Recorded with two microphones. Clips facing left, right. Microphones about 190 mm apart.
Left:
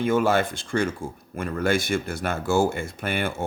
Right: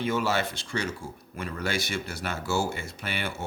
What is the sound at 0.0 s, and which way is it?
Speech, 50° left (ahead or behind).